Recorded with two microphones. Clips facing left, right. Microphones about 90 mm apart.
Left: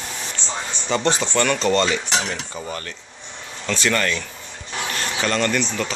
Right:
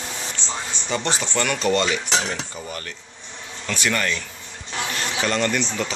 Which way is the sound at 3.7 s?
10° right (ahead or behind).